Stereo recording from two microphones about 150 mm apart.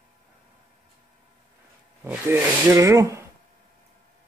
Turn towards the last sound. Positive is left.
turn(degrees=-20)  # may be behind; listen again after turning